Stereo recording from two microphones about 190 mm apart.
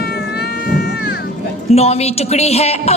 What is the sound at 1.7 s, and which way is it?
A woman's voice, 35° left (ahead or behind).